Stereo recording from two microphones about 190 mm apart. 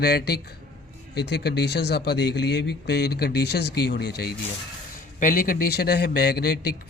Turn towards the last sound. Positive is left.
turn(degrees=55)  # may be behind; listen again after turning